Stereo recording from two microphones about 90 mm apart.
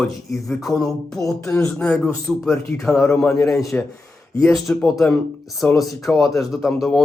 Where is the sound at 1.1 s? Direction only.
35° left (ahead or behind).